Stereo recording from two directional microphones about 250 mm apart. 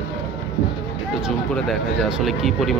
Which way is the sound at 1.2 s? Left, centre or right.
Centre.